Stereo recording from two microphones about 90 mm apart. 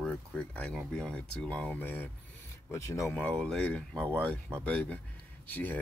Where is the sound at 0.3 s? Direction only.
15° left (ahead or behind).